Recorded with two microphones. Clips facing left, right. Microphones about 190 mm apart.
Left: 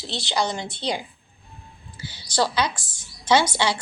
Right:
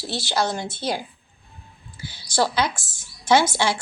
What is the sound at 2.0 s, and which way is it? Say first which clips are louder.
A woman's voice: right 1 dB; 10° right (ahead or behind).